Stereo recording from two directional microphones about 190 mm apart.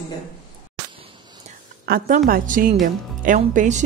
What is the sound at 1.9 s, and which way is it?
A woman's voice, 50° right (ahead or behind).